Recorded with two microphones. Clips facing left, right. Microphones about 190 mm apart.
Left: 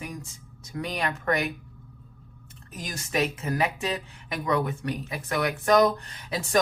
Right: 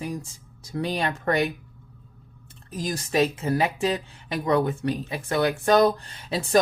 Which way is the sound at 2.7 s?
35° right (ahead or behind).